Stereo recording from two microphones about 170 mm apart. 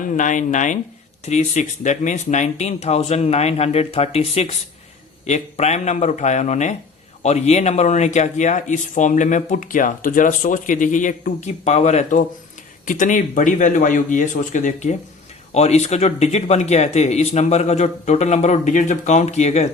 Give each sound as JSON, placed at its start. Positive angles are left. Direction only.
{"t": 0.1, "sound": "speech", "side_deg": 45}